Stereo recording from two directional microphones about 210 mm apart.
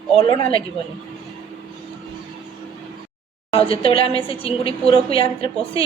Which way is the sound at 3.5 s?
25° left (ahead or behind).